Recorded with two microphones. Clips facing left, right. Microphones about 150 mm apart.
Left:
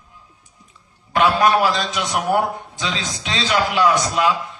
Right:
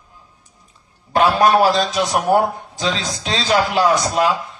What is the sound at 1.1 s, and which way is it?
A man's voice, 35° right (ahead or behind).